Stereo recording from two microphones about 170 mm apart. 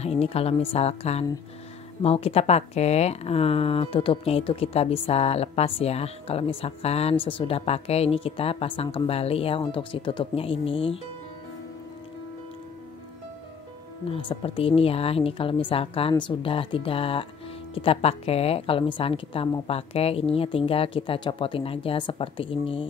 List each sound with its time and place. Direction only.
0.0 s speech: 35° left (ahead or behind)
14.1 s speech: 30° left (ahead or behind)